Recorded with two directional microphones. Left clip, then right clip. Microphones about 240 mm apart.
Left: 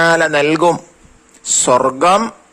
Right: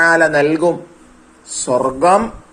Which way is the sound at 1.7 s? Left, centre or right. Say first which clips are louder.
Right 1 dB; left.